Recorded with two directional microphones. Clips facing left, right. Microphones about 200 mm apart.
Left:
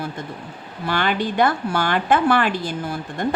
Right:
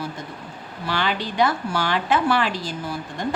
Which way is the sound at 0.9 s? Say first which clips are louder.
Left 3 dB; 50° left (ahead or behind).